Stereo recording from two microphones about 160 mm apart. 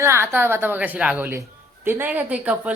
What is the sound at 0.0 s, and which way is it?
A woman's voice, 15° right (ahead or behind).